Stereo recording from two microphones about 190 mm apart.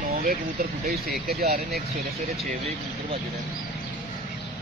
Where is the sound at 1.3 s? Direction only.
55° right (ahead or behind).